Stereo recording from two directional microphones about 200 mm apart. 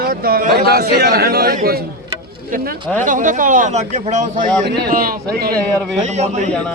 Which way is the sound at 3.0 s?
40° right (ahead or behind).